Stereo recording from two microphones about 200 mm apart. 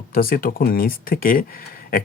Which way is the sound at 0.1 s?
45° left (ahead or behind).